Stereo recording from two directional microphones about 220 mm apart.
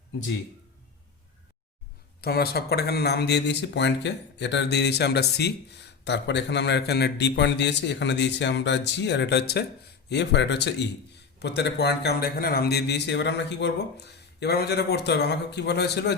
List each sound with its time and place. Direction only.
2.2 s speech: 45° left (ahead or behind)